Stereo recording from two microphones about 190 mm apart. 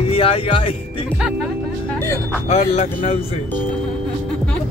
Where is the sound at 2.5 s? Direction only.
35° left (ahead or behind).